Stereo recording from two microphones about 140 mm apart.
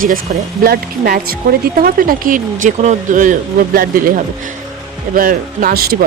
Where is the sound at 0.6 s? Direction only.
90° right; by 3.3 s 65° right (ahead or behind).